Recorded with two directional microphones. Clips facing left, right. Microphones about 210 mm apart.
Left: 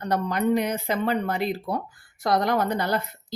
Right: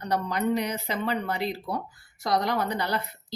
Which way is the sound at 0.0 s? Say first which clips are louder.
Left 3 dB; 50° left (ahead or behind).